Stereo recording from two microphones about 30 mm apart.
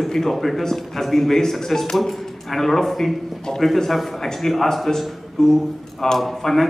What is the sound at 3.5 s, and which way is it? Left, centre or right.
Speech, centre.